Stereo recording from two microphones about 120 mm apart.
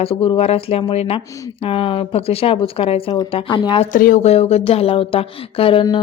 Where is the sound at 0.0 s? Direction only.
50° left (ahead or behind).